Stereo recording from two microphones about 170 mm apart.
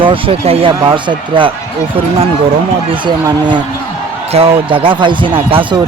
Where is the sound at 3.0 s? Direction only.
25° right (ahead or behind).